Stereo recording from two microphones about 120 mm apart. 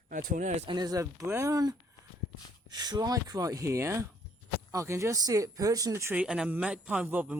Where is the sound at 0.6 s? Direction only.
35° right (ahead or behind).